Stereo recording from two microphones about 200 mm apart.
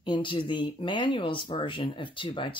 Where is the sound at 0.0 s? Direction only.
25° left (ahead or behind).